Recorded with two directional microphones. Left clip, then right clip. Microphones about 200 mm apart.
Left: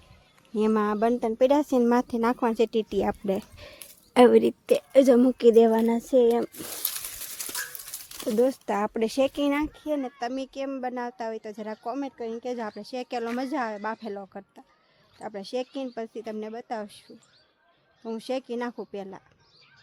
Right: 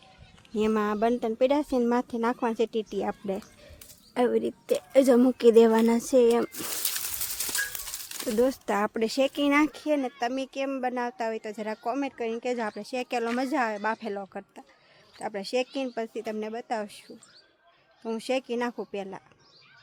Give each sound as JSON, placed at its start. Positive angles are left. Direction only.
{"t": 0.5, "sound": "speech", "side_deg": 15}
{"t": 8.2, "sound": "a woman's voice", "side_deg": 5}
{"t": 9.8, "sound": "a woman's voice", "side_deg": 0}
{"t": 18.0, "sound": "a woman's voice", "side_deg": 0}